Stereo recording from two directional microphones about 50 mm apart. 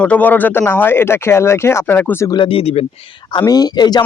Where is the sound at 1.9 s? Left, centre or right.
Left.